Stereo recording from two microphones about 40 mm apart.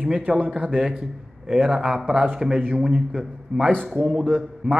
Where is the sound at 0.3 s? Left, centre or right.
Right.